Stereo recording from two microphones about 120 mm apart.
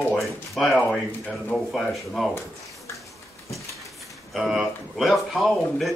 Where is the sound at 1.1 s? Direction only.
15° left (ahead or behind).